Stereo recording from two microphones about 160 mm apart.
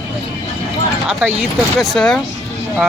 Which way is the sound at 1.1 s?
5° right (ahead or behind).